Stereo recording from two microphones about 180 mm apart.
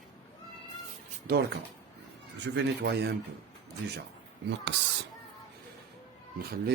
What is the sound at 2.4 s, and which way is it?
Speech, 75° right (ahead or behind).